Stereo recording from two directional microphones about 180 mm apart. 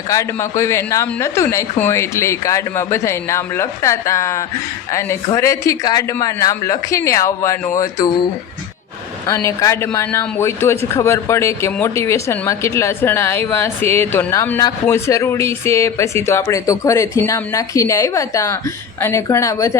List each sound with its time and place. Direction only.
0.1 s speech: 15° left (ahead or behind)
9.2 s speech: 15° left (ahead or behind)